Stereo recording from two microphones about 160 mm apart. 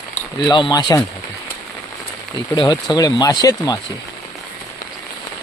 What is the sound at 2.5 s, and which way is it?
Speech, 25° left (ahead or behind).